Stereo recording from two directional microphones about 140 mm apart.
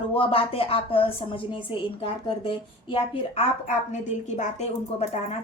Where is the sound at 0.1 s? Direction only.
40° left (ahead or behind).